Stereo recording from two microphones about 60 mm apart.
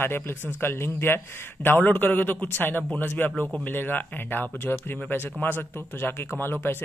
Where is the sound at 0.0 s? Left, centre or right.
Left.